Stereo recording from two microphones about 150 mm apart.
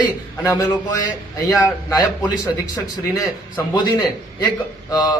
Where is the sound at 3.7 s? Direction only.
30° left (ahead or behind).